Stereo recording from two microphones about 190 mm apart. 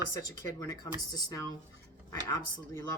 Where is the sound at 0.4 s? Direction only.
20° left (ahead or behind).